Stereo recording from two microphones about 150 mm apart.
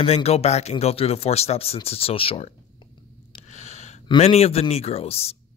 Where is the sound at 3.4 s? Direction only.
50° left (ahead or behind).